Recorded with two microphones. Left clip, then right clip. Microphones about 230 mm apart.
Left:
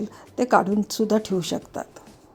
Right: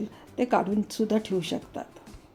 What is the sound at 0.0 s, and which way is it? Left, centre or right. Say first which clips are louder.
A woman's voice: left 4 dB; left.